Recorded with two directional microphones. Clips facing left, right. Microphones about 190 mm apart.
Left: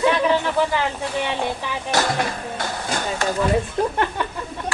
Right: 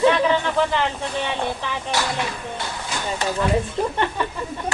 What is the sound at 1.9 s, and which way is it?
Speech, 45° left (ahead or behind).